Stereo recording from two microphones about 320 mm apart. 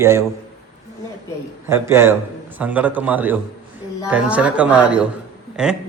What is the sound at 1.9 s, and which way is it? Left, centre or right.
A man's voice, centre.